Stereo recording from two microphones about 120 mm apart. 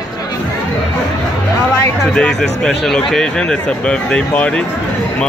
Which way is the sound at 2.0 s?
5° left (ahead or behind).